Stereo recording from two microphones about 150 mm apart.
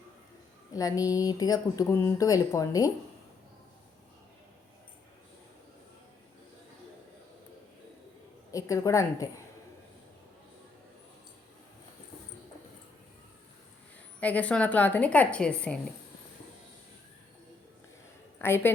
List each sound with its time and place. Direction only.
0.7 s speech: 25° left (ahead or behind)
8.5 s speech: 20° left (ahead or behind)
14.2 s a woman's voice: 10° left (ahead or behind)
18.3 s a woman's voice: 15° left (ahead or behind)